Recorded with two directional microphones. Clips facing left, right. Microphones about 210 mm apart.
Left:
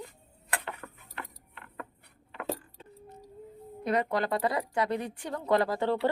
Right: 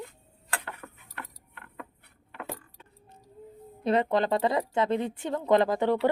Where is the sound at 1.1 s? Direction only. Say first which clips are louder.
Left 2 dB; 20° left (ahead or behind).